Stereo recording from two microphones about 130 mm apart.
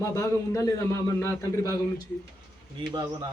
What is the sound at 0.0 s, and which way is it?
A man's voice, 25° left (ahead or behind).